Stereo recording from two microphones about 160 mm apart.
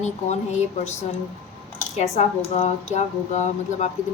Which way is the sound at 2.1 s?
40° left (ahead or behind).